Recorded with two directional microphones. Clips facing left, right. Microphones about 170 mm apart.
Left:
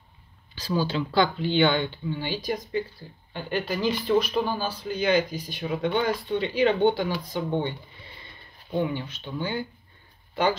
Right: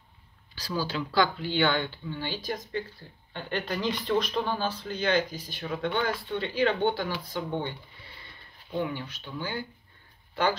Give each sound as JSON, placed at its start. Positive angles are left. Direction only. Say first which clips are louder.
{"t": 0.6, "sound": "speech", "louder": "left 5 dB", "side_deg": 20}
{"t": 8.7, "sound": "speech", "louder": "left 4 dB", "side_deg": 20}